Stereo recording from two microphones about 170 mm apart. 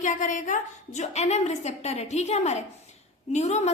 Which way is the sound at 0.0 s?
45° left (ahead or behind).